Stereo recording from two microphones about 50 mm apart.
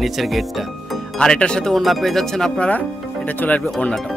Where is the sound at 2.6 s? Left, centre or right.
Left.